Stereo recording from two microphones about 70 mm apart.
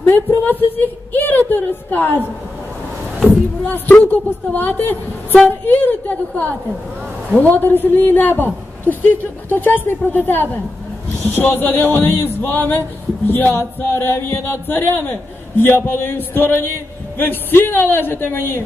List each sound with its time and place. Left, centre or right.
0.0 s a woman's voice: left
3.6 s a woman's voice: left